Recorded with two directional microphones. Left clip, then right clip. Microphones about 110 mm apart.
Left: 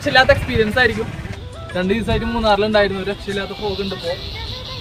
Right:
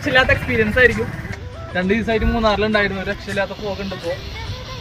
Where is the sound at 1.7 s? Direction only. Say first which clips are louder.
Right 1 dB; 40° left (ahead or behind).